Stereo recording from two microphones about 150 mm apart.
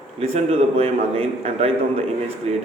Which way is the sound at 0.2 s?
45° right (ahead or behind).